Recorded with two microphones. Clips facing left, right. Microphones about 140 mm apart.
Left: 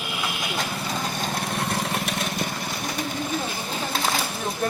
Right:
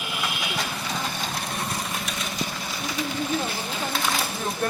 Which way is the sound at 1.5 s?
70° left (ahead or behind).